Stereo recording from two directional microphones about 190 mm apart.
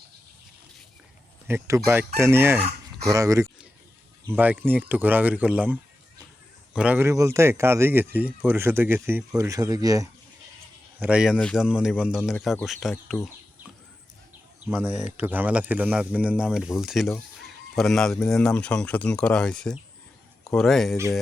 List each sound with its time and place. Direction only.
1.5 s speech: 15° right (ahead or behind)
11.0 s speech: 5° right (ahead or behind)
14.7 s speech: 10° right (ahead or behind)